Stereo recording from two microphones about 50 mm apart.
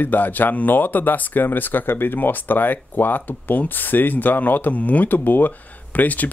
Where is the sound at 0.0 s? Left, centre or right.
Left.